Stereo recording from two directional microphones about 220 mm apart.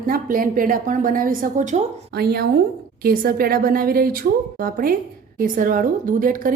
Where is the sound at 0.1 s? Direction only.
40° right (ahead or behind).